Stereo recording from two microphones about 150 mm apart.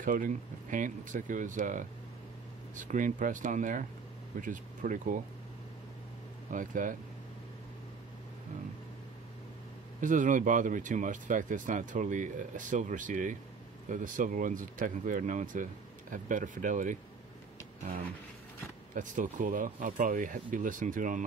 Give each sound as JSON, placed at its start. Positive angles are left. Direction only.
{"t": 0.0, "sound": "speech", "side_deg": -60}
{"t": 6.5, "sound": "speech", "side_deg": -60}
{"t": 9.9, "sound": "speech", "side_deg": -60}
{"t": 18.9, "sound": "speech", "side_deg": -60}